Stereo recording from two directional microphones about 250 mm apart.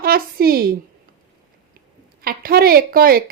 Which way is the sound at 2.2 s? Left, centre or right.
Right.